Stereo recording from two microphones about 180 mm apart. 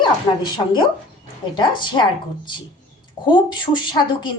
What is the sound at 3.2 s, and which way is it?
Speech, 25° left (ahead or behind).